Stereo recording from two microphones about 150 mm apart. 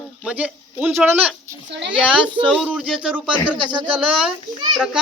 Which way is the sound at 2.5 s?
5° right (ahead or behind).